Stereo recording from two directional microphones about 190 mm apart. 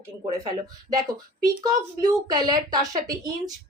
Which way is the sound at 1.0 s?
20° right (ahead or behind).